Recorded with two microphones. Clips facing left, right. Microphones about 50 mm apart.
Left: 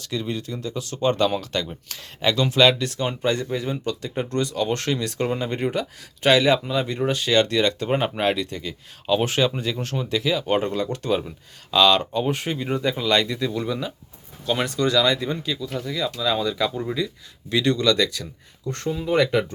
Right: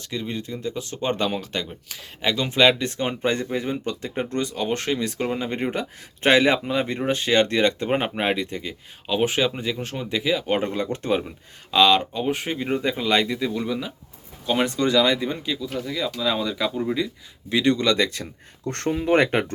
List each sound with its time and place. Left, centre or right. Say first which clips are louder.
0.0 s speech: left 2 dB; centre
6.2 s speech: even; right
7.9 s speech: left 1 dB; centre
17.5 s speech: even; right
18.7 s speech: right 3 dB; right